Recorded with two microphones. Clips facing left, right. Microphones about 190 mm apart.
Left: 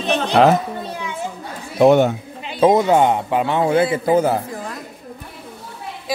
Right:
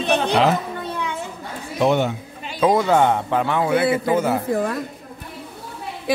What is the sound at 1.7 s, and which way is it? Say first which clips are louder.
Speech: left 6 dB; 50° left (ahead or behind).